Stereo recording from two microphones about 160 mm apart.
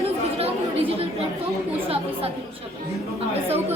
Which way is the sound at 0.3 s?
40° right (ahead or behind).